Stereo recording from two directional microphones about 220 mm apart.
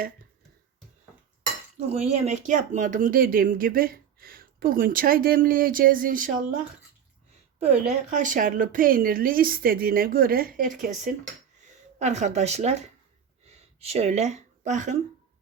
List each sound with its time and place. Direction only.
1.9 s speech: 30° right (ahead or behind)
7.6 s speech: 30° right (ahead or behind)